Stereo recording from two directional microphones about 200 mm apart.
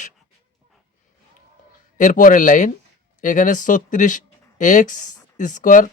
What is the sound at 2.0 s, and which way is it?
Speech, 40° left (ahead or behind).